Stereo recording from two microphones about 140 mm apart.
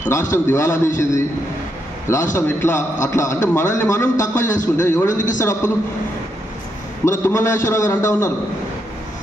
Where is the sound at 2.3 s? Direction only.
15° left (ahead or behind).